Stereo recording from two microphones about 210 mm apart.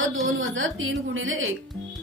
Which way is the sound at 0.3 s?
65° right (ahead or behind).